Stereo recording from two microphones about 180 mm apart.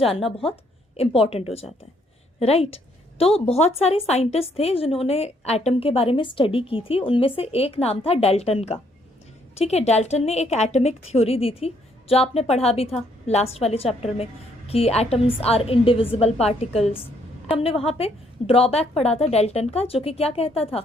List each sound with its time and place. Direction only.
0.0 s a woman's voice: 30° left (ahead or behind)